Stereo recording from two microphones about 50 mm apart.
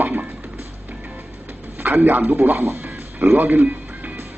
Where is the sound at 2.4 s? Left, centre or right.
Right.